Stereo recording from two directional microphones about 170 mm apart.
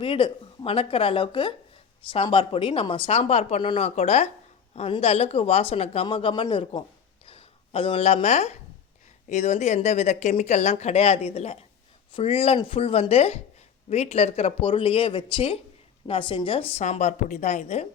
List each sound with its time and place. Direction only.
0.0 s speech: 30° left (ahead or behind)